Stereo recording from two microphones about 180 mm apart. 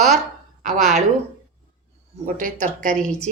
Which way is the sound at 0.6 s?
40° right (ahead or behind).